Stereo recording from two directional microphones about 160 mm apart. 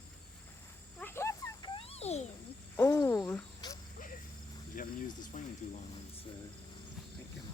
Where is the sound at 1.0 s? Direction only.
15° left (ahead or behind); by 2.3 s 40° left (ahead or behind).